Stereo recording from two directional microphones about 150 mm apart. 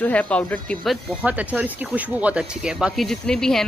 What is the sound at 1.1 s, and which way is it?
Speech, 10° right (ahead or behind).